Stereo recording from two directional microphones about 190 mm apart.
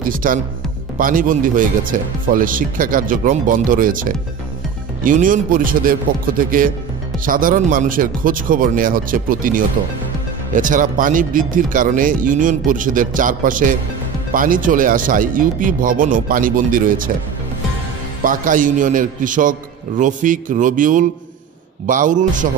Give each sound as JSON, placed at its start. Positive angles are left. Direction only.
{"t": 0.0, "sound": "a man's voice", "side_deg": -45}
{"t": 7.2, "sound": "a man's voice", "side_deg": -45}
{"t": 18.2, "sound": "a man's voice", "side_deg": -45}